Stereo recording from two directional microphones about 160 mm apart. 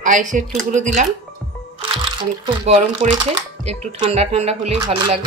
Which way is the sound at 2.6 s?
45° right (ahead or behind).